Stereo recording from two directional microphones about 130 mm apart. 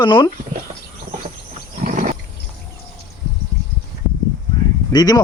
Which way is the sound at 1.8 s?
90° right.